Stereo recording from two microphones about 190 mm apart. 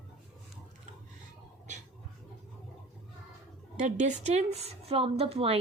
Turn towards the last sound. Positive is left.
turn(degrees=-30)  # may be behind; listen again after turning